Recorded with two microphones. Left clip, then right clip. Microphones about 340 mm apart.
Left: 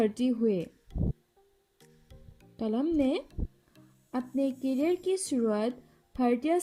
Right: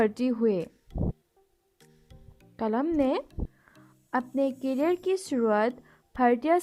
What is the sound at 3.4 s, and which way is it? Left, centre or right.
Music, right.